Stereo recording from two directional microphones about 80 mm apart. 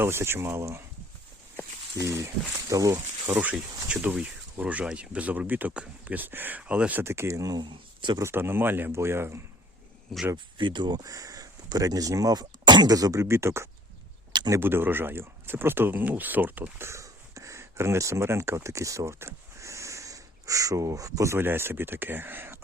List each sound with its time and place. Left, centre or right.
0.0 s speech: right
2.0 s speech: right
3.2 s speech: right
3.5 s speech: centre
4.0 s speech: right
7.0 s speech: right
7.6 s speech: right
8.2 s speech: right
10.3 s speech: right
13.2 s speech: right
21.3 s speech: right